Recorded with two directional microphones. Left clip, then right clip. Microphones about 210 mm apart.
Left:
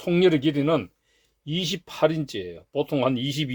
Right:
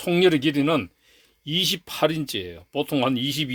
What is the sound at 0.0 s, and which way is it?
Speech, 30° right (ahead or behind).